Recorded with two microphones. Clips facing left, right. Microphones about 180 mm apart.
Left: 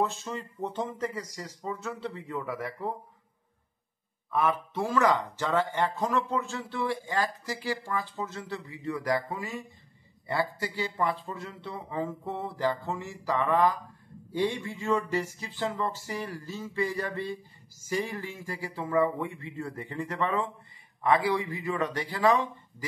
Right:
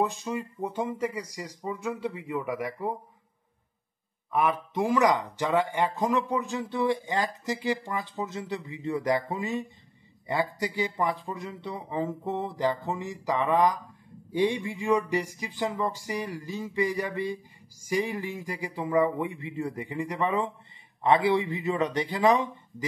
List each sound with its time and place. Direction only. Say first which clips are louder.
0.0 s speech: right 2 dB; 15° right (ahead or behind)
4.3 s speech: right 1 dB; 15° right (ahead or behind)